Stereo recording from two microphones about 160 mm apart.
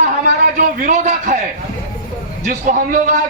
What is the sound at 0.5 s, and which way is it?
Speech, 60° right (ahead or behind).